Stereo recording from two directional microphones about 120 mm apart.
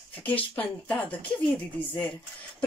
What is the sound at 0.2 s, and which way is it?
Speech, 15° left (ahead or behind).